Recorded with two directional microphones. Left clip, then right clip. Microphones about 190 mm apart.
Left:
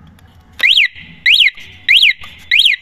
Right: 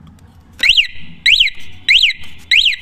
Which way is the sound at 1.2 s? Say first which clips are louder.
Left 2 dB; 25° right (ahead or behind).